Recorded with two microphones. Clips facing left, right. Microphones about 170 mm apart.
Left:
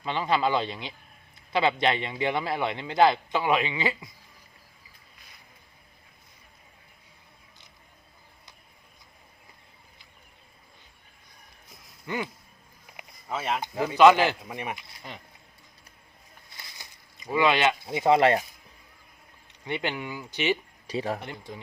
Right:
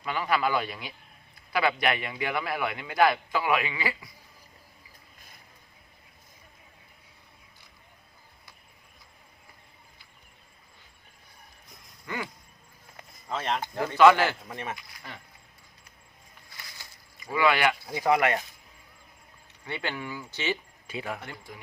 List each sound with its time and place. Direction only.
0.0 s a man's voice: 25° left (ahead or behind)
12.0 s a man's voice: 20° left (ahead or behind)
13.0 s speech: 5° left (ahead or behind); by 15.2 s 20° left (ahead or behind)
16.5 s a sound: 20° left (ahead or behind)
19.6 s speech: 20° left (ahead or behind)
20.8 s speech: 35° left (ahead or behind)
21.2 s a man's voice: 20° left (ahead or behind)